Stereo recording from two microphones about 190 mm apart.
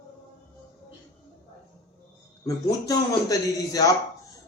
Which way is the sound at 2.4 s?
20° left (ahead or behind).